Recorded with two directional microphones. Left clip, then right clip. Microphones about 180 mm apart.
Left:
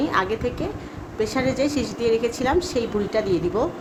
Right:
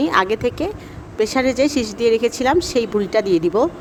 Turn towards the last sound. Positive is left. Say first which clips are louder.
# right 6 dB
turn(degrees=-50)  # may be behind; listen again after turning